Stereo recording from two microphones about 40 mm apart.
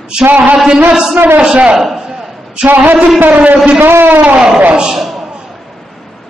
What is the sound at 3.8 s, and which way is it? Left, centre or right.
Speech, right.